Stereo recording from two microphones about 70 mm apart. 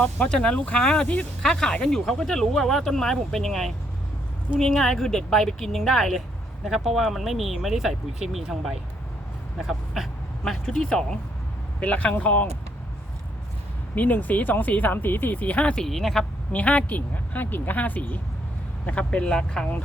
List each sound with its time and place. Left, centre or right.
0.0 s speech: centre
1.0 s speech: centre
1.4 s speech: centre
13.9 s speech: left; by 16.2 s centre
16.5 s speech: left